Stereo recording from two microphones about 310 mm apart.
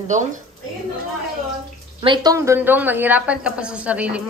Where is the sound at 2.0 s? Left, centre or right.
Centre.